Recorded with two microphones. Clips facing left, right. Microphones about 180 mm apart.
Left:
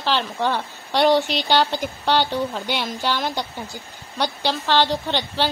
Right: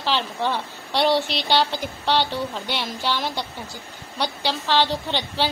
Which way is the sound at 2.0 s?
Centre (ahead or behind).